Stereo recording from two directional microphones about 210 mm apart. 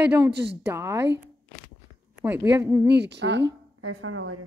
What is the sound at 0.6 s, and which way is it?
Speech, 15° right (ahead or behind).